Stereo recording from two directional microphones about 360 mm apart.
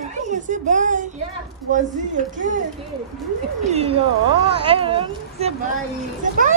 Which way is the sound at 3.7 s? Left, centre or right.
Centre.